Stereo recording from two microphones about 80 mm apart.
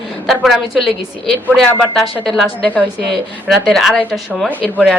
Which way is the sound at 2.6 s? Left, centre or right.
Centre.